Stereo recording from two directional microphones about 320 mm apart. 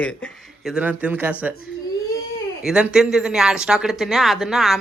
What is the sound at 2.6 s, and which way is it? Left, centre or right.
Speech, centre.